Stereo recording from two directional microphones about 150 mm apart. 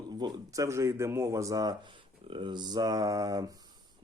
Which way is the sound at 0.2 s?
25° right (ahead or behind).